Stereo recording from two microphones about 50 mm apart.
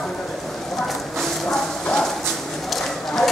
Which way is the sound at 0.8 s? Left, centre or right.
Centre.